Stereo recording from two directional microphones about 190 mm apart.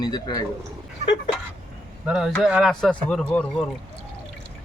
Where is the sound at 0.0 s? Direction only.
20° left (ahead or behind).